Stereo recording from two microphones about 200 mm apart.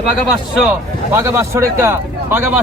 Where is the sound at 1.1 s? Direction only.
10° right (ahead or behind).